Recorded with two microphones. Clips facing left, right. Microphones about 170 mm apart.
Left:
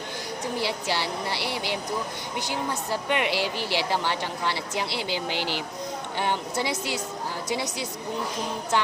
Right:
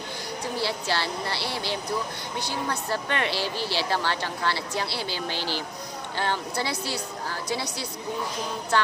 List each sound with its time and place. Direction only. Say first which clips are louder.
0.5 s a woman's voice: even; 15° left (ahead or behind)